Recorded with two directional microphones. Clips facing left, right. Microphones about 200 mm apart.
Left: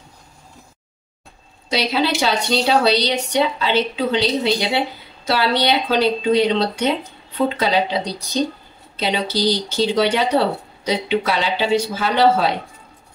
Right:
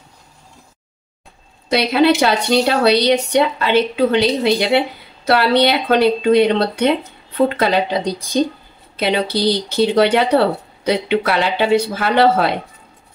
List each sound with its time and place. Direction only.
1.7 s a woman's voice: 55° right (ahead or behind)